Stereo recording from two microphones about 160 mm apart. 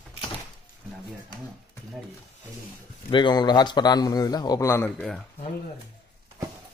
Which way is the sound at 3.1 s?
30° left (ahead or behind).